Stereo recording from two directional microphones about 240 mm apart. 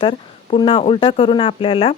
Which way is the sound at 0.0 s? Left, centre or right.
Left.